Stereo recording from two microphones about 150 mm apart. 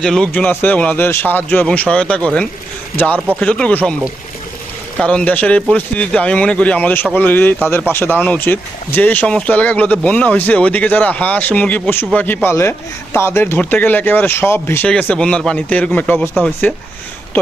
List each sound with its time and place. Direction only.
0.0 s speech: 5° left (ahead or behind)
4.9 s speech: 10° left (ahead or behind)